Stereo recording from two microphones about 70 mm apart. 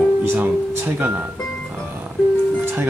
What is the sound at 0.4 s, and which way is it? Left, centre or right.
Speech, right.